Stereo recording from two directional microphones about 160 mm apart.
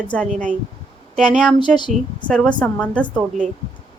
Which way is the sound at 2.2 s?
5° left (ahead or behind).